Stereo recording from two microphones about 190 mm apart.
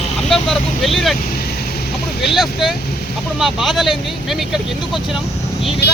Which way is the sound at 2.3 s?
Centre (ahead or behind).